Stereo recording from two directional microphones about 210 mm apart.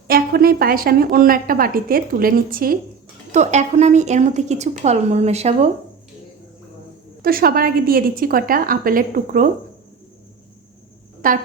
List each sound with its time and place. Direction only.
0.1 s a woman's voice: 45° right (ahead or behind)
3.3 s a woman's voice: 35° right (ahead or behind)
7.2 s a woman's voice: 45° right (ahead or behind)
11.2 s a woman's voice: 40° right (ahead or behind)